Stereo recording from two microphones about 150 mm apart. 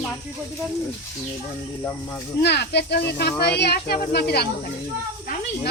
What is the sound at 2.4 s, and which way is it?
Speech, 90° left.